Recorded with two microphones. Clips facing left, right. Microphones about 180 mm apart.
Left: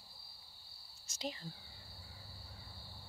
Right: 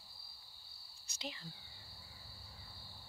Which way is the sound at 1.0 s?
40° left (ahead or behind).